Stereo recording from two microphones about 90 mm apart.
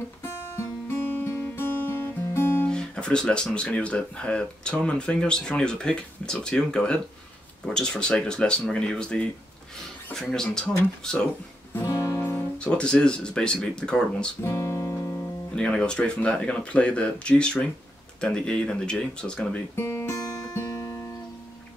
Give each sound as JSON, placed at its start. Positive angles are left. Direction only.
{"t": 0.2, "sound": "music", "side_deg": 25}
{"t": 2.7, "sound": "speech", "side_deg": 10}
{"t": 10.3, "sound": "speech", "side_deg": 5}
{"t": 11.8, "sound": "guitar", "side_deg": 35}
{"t": 12.2, "sound": "music", "side_deg": 25}
{"t": 12.5, "sound": "speech", "side_deg": 10}
{"t": 14.4, "sound": "music", "side_deg": 30}
{"t": 15.5, "sound": "speech", "side_deg": 10}
{"t": 19.7, "sound": "speech", "side_deg": 25}
{"t": 20.2, "sound": "music", "side_deg": 45}
{"t": 20.5, "sound": "music", "side_deg": 30}